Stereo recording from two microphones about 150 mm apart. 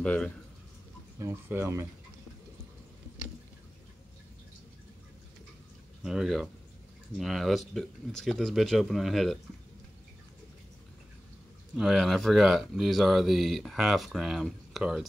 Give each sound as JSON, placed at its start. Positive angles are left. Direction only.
{"t": 0.0, "sound": "speech", "side_deg": 5}
{"t": 1.2, "sound": "speech", "side_deg": -15}
{"t": 6.0, "sound": "speech", "side_deg": 0}
{"t": 11.7, "sound": "speech", "side_deg": -5}